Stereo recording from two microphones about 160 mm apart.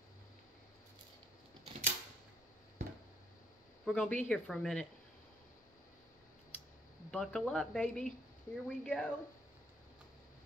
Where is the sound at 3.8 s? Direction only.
5° left (ahead or behind).